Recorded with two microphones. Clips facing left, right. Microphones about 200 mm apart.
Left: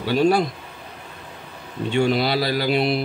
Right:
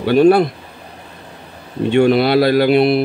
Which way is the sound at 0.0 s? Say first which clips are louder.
Right 8 dB; 60° right (ahead or behind).